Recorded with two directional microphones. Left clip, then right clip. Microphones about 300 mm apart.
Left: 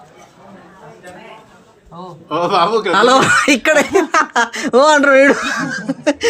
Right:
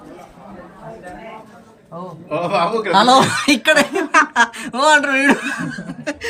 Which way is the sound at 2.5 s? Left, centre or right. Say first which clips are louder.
Left 3 dB; centre.